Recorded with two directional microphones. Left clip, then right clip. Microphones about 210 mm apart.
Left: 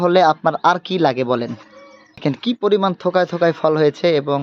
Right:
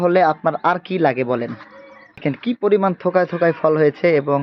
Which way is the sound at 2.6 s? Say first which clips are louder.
Even; 5° left (ahead or behind).